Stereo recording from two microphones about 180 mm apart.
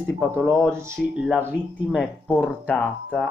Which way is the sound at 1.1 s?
5° right (ahead or behind).